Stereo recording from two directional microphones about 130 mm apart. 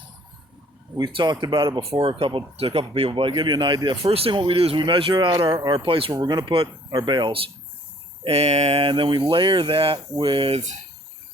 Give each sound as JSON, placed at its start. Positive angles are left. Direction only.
{"t": 0.9, "sound": "speech", "side_deg": -35}
{"t": 4.0, "sound": "speech", "side_deg": -50}
{"t": 8.2, "sound": "speech", "side_deg": -55}